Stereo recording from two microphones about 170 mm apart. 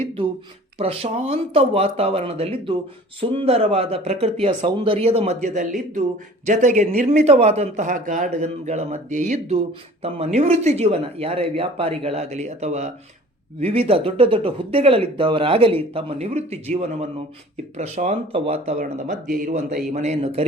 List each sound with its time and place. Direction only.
0.8 s speech: 35° right (ahead or behind)
17.7 s speech: 40° right (ahead or behind)
18.8 s speech: 55° right (ahead or behind); by 20.5 s 35° right (ahead or behind)